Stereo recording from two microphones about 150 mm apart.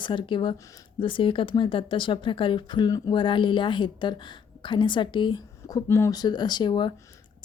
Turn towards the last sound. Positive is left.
turn(degrees=30)  # may be behind; listen again after turning